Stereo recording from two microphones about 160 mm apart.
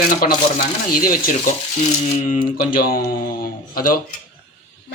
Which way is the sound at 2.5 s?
65° left (ahead or behind).